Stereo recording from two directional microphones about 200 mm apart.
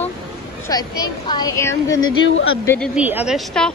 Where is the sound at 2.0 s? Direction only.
80° left.